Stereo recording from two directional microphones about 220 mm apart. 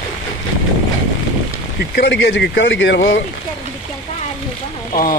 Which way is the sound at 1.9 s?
50° left (ahead or behind).